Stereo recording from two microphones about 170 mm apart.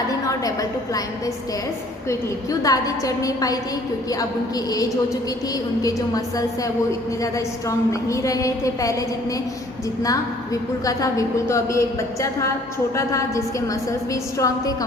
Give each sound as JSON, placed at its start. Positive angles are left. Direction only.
{"t": 2.0, "sound": "a woman's voice", "side_deg": 20}
{"t": 4.7, "sound": "a woman's voice", "side_deg": 20}
{"t": 13.0, "sound": "a woman's voice", "side_deg": 20}